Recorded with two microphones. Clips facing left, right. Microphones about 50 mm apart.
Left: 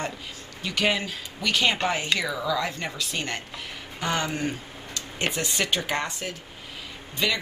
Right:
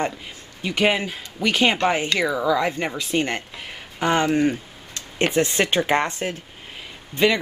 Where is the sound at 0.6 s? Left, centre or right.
Right.